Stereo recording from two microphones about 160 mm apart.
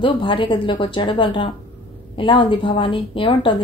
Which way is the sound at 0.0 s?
30° left (ahead or behind).